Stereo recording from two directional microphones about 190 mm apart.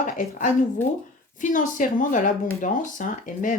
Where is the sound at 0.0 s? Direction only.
40° left (ahead or behind).